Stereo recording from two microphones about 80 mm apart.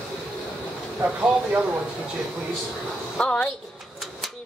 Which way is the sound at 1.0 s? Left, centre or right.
Centre.